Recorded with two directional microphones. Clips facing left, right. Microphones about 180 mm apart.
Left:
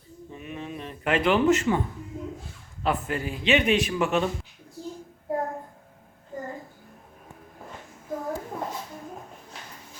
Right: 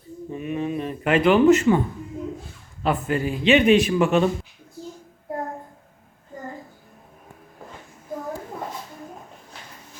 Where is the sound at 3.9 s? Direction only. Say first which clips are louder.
Right 6 dB; 40° right (ahead or behind).